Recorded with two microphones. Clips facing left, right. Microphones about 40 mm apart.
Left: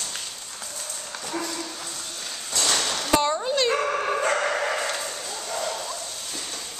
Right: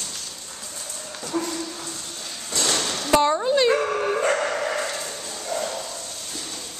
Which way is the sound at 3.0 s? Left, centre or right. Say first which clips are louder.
Right 5 dB; centre.